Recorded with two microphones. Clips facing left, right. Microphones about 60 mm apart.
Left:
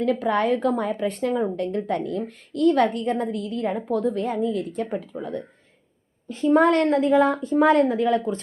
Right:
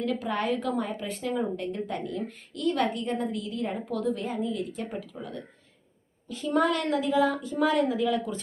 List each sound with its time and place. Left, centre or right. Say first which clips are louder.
0.0 s a woman's voice: left 7 dB; left
3.9 s a woman's voice: left 5 dB; left